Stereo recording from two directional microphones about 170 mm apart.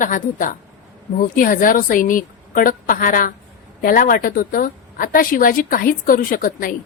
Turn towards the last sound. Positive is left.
turn(degrees=55)  # may be behind; listen again after turning